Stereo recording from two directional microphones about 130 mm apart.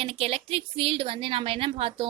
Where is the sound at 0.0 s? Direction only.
50° right (ahead or behind).